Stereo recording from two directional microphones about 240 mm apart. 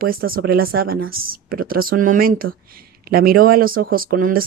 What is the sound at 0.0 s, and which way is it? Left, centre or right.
Speech, right.